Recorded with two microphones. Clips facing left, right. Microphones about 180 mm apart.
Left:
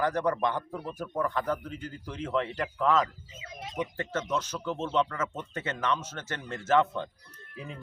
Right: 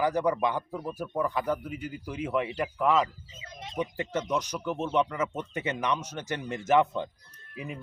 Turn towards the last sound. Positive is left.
turn(degrees=-10)  # may be behind; listen again after turning